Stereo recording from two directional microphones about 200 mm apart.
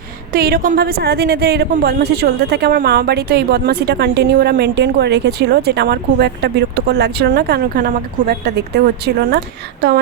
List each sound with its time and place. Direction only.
0.3 s a woman's voice: 50° right (ahead or behind)